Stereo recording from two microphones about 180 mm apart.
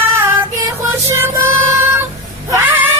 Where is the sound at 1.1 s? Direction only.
15° right (ahead or behind).